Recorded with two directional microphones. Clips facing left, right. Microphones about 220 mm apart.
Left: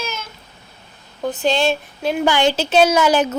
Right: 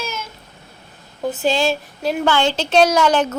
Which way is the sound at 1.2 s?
5° right (ahead or behind).